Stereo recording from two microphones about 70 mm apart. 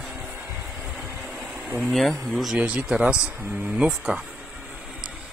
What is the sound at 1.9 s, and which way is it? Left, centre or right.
Speech, centre.